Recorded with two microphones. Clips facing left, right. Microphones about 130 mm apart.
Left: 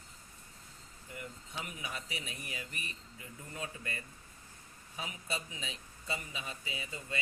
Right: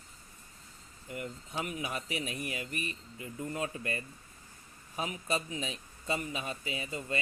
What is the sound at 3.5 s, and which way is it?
A man's voice, 40° right (ahead or behind).